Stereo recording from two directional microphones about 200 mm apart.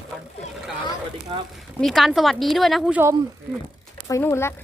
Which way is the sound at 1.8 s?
Centre (ahead or behind).